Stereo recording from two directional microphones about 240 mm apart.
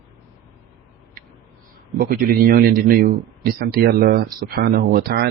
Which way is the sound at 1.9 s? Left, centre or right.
Right.